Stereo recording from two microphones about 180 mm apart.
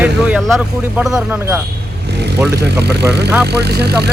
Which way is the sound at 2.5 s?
65° right (ahead or behind).